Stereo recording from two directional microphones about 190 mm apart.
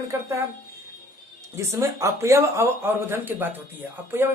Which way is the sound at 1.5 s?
15° right (ahead or behind).